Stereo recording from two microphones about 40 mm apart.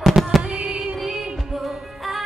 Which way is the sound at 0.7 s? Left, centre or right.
Right.